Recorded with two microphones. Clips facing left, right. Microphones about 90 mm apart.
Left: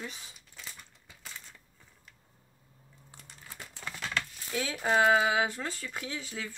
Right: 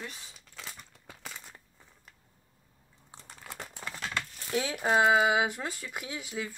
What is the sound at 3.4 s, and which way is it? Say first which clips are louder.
Crumpling: right 6 dB; 85° right.